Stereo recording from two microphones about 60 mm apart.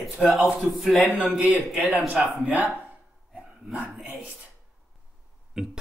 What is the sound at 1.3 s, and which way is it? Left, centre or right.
Speech, right.